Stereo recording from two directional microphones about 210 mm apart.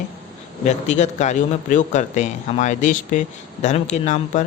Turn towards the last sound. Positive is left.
turn(degrees=35)  # may be behind; listen again after turning